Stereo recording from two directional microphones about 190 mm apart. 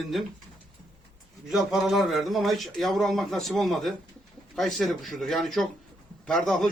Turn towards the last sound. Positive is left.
turn(degrees=0)  # may be behind; listen again after turning